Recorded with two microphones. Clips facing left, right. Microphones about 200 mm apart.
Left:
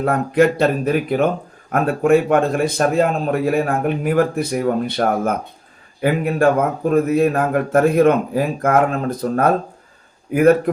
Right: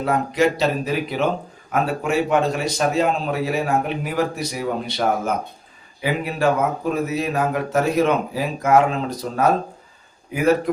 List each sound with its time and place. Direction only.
0.0 s a man's voice: 55° left (ahead or behind)